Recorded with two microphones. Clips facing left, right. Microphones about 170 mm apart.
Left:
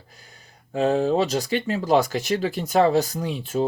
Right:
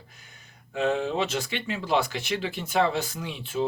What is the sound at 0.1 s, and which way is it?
Speech, 35° left (ahead or behind).